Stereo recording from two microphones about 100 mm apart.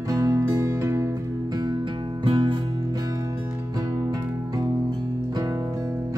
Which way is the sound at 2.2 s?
60° right (ahead or behind).